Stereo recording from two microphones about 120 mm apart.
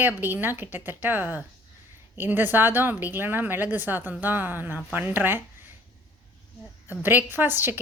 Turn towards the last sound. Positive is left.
turn(degrees=-15)  # may be behind; listen again after turning